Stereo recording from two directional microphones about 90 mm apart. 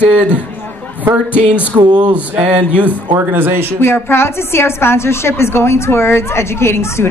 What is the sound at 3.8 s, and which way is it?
A woman's voice, 25° left (ahead or behind).